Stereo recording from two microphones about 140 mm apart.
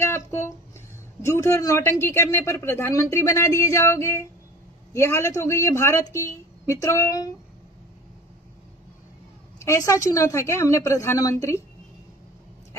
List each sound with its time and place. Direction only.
0.0 s a sound: 20° left (ahead or behind)
1.2 s speech: 20° left (ahead or behind)
9.6 s speech: 20° left (ahead or behind)